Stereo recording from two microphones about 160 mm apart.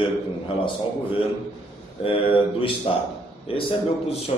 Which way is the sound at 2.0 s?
35° left (ahead or behind).